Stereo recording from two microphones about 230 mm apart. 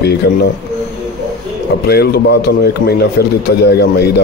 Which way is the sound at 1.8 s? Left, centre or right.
Left.